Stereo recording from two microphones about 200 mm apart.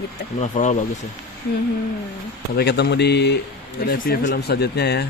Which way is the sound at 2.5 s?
55° left (ahead or behind).